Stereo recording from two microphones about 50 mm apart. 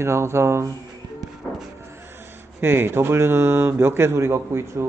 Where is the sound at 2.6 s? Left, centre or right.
Right.